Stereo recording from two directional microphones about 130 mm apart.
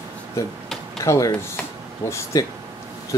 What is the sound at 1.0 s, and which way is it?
Speech, 25° left (ahead or behind).